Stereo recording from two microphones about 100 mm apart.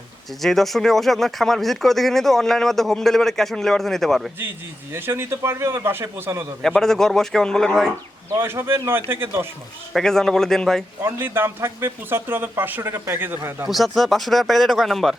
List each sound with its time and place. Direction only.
0.4 s speech: centre (ahead or behind)
4.4 s speech: 20° right (ahead or behind)
6.6 s speech: 5° left (ahead or behind)
8.4 s speech: 25° right (ahead or behind)
9.9 s speech: 5° left (ahead or behind)
11.0 s speech: 25° right (ahead or behind)
13.7 s speech: centre (ahead or behind)